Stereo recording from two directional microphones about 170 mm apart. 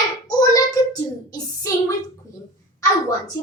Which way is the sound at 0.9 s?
20° left (ahead or behind).